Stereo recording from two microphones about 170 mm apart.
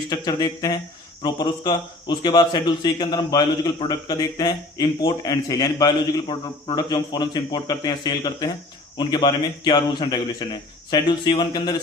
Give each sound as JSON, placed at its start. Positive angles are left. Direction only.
{"t": 0.1, "sound": "a man's voice", "side_deg": 20}